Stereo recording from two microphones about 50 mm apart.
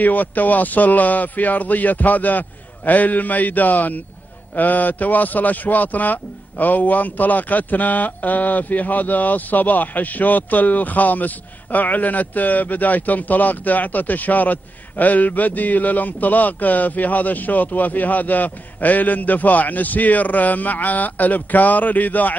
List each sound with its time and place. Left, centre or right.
0.0 s a man's voice: left